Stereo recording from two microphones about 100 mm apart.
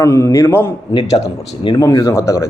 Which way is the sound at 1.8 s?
35° left (ahead or behind).